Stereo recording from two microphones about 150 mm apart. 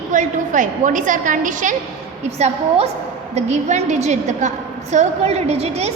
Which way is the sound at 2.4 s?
45° right (ahead or behind).